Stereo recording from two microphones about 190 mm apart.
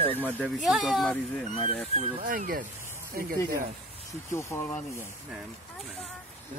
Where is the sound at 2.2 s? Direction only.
45° right (ahead or behind).